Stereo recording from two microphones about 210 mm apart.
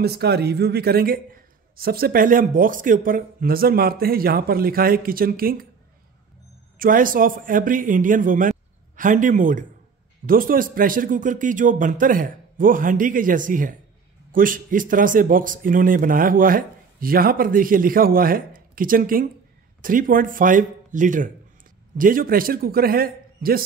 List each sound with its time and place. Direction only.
0.0 s a man's voice: 50° right (ahead or behind)
6.8 s a man's voice: 40° right (ahead or behind)